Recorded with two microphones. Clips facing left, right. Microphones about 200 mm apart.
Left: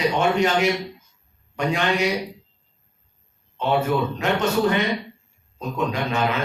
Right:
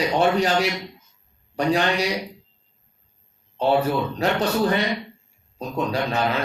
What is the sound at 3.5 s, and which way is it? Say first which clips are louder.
Speech: right 1 dB; 35° right (ahead or behind).